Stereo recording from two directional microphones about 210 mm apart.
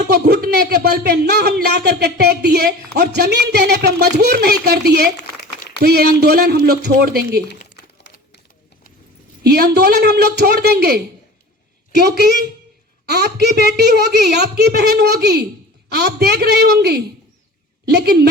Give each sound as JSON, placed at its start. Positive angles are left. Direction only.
{"t": 0.1, "sound": "a man's voice", "side_deg": -50}
{"t": 9.4, "sound": "a man's voice", "side_deg": -50}
{"t": 12.0, "sound": "a man's voice", "side_deg": -50}